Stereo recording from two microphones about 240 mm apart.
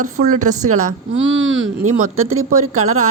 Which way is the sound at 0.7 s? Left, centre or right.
Right.